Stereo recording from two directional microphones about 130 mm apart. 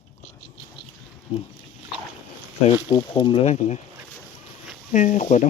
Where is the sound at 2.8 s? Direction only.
40° left (ahead or behind); by 3.8 s 60° left (ahead or behind).